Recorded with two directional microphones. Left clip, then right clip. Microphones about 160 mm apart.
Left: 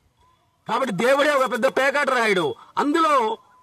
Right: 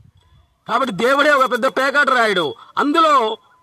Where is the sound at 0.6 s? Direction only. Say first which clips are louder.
Right 3 dB; 25° right (ahead or behind).